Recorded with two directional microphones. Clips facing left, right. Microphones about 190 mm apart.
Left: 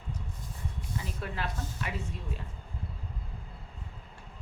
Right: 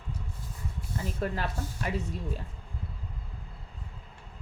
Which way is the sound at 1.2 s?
40° right (ahead or behind).